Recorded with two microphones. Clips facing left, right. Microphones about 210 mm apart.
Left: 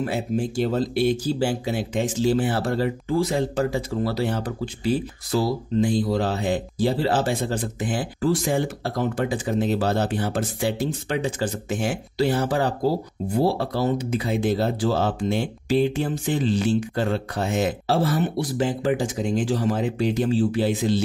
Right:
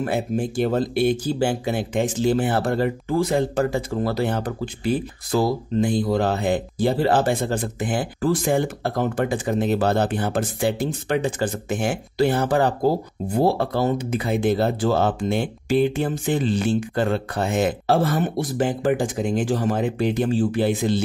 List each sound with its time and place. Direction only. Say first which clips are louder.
0.0 s speech: right 1 dB; 55° right (ahead or behind)